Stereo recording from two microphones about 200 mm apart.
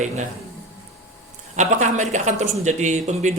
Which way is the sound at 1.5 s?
35° right (ahead or behind).